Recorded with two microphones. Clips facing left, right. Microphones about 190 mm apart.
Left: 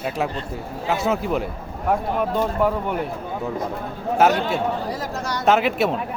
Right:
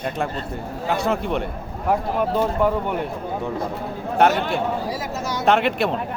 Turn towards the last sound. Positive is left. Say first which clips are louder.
# even
turn(degrees=0)  # may be behind; listen again after turning